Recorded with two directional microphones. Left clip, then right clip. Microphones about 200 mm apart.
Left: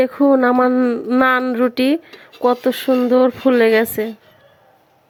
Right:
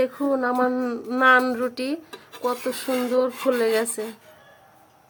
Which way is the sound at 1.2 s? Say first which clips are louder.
Left 1 dB; 30° left (ahead or behind).